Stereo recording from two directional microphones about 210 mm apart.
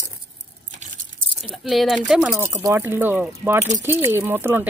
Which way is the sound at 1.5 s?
Centre (ahead or behind).